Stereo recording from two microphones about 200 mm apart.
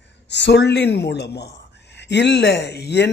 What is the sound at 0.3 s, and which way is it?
A man's voice, 60° left (ahead or behind).